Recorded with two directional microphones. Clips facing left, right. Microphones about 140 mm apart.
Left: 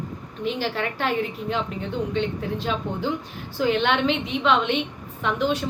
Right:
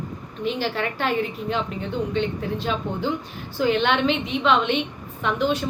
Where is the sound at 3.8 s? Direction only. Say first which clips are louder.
Right 1 dB; 5° left (ahead or behind).